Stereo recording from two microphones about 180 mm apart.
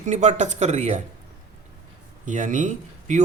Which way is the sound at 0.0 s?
40° right (ahead or behind).